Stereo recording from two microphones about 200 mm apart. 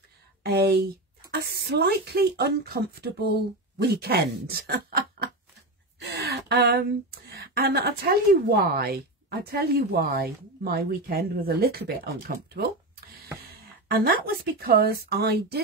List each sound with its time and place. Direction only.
0.4 s speech: 55° right (ahead or behind)